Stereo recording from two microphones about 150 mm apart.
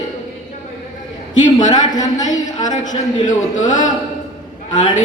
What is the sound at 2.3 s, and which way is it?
Speech, 25° left (ahead or behind).